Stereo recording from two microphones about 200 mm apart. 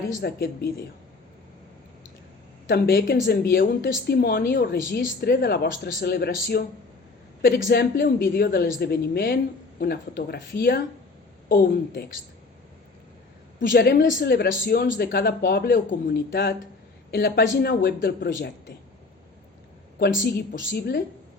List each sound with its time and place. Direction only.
0.2 s speech: 50° left (ahead or behind)
2.6 s speech: 50° left (ahead or behind)
7.7 s speech: 50° left (ahead or behind)
13.7 s speech: 55° left (ahead or behind)
20.0 s speech: 50° left (ahead or behind)